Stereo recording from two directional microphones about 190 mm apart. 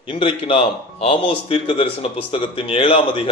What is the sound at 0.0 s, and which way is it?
A man's voice, 25° left (ahead or behind).